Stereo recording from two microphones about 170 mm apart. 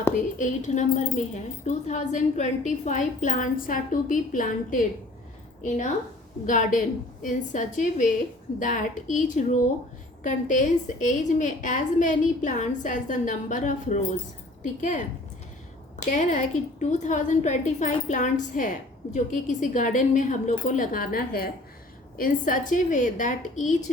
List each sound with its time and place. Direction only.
0.2 s a woman's voice: 45° left (ahead or behind)
16.0 s a woman's voice: 45° left (ahead or behind)